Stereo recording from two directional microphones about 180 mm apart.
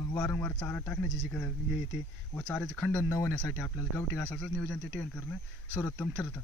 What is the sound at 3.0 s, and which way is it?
Speech, 15° left (ahead or behind).